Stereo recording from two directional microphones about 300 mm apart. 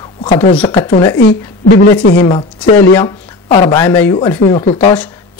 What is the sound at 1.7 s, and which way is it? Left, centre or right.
Speech, left.